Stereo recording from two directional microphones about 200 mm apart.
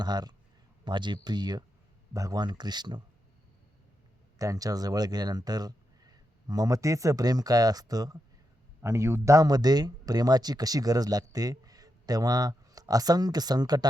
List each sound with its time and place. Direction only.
0.0 s speech: 20° right (ahead or behind)
4.4 s speech: 15° right (ahead or behind)